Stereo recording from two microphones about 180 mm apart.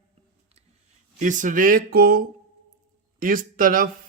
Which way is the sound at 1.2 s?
45° right (ahead or behind).